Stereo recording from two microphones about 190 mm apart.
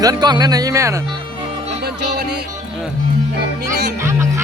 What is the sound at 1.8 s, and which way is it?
Music, 60° right (ahead or behind).